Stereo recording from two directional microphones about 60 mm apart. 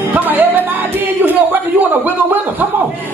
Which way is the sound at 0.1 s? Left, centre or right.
Right.